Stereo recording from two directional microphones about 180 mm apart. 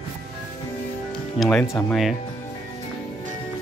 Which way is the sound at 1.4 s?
Centre (ahead or behind).